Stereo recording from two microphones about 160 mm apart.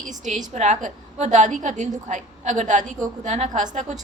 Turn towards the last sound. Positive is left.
turn(degrees=-50)  # may be behind; listen again after turning